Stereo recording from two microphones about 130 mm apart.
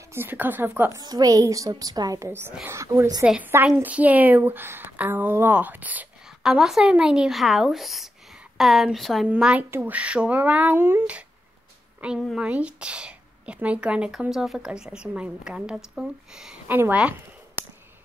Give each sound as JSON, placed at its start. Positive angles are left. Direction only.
{"t": 0.1, "sound": "a woman's voice", "side_deg": -15}
{"t": 1.0, "sound": "a woman's voice", "side_deg": -30}
{"t": 3.3, "sound": "a woman's voice", "side_deg": -15}
{"t": 9.3, "sound": "a woman's voice", "side_deg": -10}
{"t": 16.6, "sound": "a woman's voice", "side_deg": -15}